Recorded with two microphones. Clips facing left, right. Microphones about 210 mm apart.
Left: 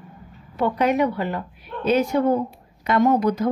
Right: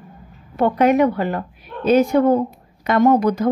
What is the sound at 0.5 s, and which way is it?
A woman's voice, 55° right (ahead or behind).